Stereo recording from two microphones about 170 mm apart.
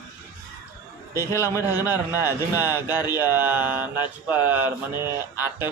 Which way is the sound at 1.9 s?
10° right (ahead or behind).